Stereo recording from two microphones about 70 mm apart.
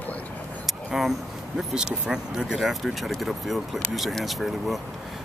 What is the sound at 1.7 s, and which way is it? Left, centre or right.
Speech, centre.